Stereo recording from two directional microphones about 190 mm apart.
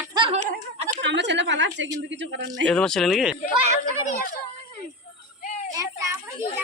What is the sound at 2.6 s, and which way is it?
Speech, 5° left (ahead or behind).